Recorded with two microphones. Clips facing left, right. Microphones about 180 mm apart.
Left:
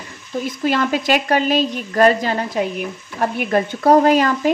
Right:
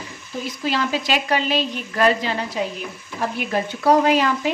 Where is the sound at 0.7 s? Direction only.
50° left (ahead or behind).